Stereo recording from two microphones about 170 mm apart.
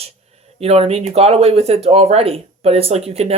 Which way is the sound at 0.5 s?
35° right (ahead or behind).